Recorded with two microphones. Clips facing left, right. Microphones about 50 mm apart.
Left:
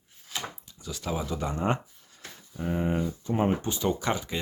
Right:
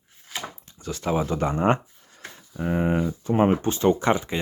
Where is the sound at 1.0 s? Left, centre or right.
Right.